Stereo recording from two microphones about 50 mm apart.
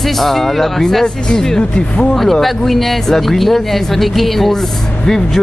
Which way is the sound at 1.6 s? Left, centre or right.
Left.